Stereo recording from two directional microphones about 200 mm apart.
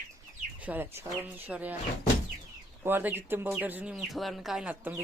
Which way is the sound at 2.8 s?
10° right (ahead or behind).